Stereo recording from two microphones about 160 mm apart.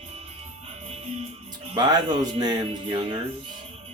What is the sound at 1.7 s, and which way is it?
Speech, 25° right (ahead or behind).